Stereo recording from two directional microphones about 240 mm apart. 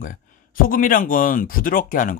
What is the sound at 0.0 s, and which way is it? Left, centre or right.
Speech, left.